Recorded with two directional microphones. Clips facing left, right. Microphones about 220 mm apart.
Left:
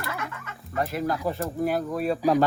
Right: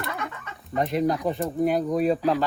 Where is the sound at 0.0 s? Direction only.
Centre (ahead or behind).